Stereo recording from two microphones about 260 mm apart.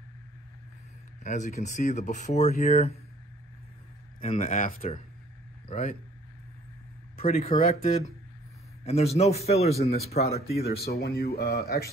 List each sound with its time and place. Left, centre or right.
1.2 s speech: left
4.2 s speech: left
7.2 s speech: left
10.6 s speech: left